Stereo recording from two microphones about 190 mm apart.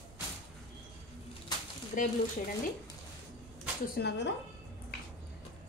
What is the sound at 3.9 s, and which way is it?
Speech, 65° left (ahead or behind).